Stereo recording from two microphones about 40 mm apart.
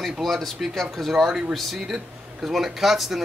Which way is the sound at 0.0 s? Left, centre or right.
Centre.